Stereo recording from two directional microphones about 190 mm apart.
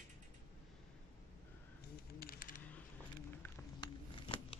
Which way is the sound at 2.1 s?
50° left (ahead or behind).